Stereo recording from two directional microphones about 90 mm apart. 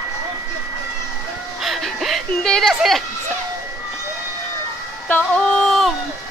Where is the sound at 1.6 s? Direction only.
Centre (ahead or behind).